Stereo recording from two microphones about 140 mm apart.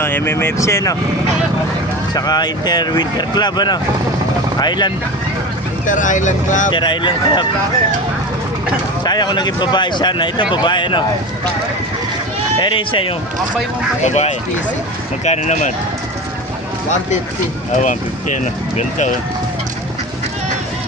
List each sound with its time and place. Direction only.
0.0 s speech: 15° left (ahead or behind)
2.1 s speech: 30° left (ahead or behind)
5.8 s speech: 65° left (ahead or behind)
6.7 s speech: 35° left (ahead or behind)
9.0 s speech: 30° left (ahead or behind)
12.6 s speech: 40° left (ahead or behind)
14.0 s speech: 55° left (ahead or behind)
17.7 s speech: 60° left (ahead or behind)